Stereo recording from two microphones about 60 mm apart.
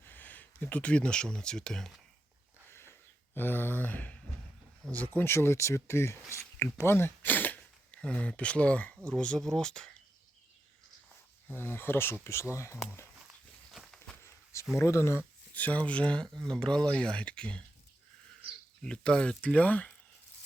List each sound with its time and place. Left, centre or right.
0.0 s speech: left; by 1.9 s centre
2.6 s a sound: left
3.3 s speech: left
5.2 s speech: left; by 9.9 s centre
11.4 s speech: left
12.2 s speech: left
13.7 s a sound: centre
14.8 s speech: left
15.5 s speech: left
16.2 s speech: centre
18.8 s speech: centre